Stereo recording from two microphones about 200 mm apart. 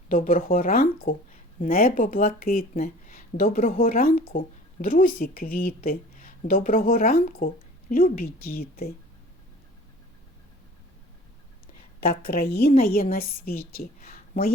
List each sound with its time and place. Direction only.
0.1 s speech: 45° left (ahead or behind)
11.9 s speech: 50° left (ahead or behind)